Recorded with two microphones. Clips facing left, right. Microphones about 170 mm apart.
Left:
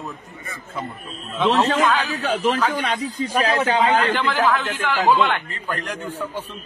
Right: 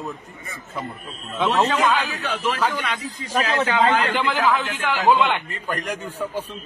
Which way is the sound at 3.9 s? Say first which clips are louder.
Left 2 dB; 10° right (ahead or behind).